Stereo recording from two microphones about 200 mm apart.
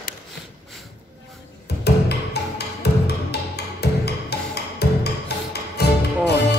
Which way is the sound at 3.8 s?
55° left (ahead or behind).